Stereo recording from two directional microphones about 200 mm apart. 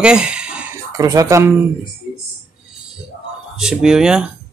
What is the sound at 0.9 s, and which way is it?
Speech, 15° right (ahead or behind).